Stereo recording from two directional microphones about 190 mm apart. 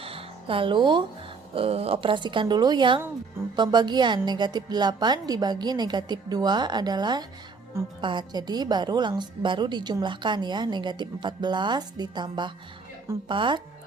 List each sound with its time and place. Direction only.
0.0 s music: 30° right (ahead or behind)
1.5 s a woman's voice: 30° right (ahead or behind)